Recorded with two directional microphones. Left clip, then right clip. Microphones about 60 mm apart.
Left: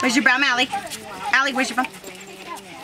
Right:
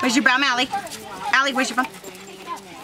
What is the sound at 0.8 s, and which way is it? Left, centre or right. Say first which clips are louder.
Speech: even; centre.